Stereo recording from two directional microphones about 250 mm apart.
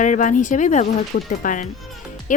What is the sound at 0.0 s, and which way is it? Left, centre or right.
A woman's voice, left.